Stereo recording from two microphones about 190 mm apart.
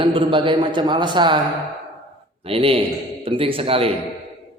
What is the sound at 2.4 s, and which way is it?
A man's voice, 30° right (ahead or behind).